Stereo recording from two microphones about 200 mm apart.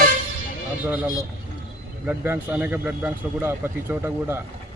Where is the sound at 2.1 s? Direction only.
10° right (ahead or behind).